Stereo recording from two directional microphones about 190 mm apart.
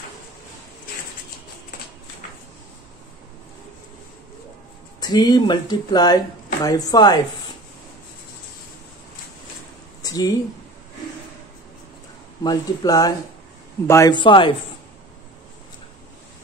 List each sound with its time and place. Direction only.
5.0 s speech: 20° left (ahead or behind)
10.0 s a sound: 20° left (ahead or behind)
12.4 s speech: 20° left (ahead or behind)